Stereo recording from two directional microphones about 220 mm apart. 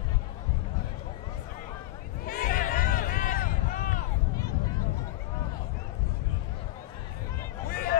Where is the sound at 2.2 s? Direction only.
40° left (ahead or behind).